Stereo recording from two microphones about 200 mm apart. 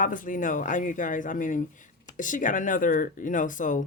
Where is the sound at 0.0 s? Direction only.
40° left (ahead or behind).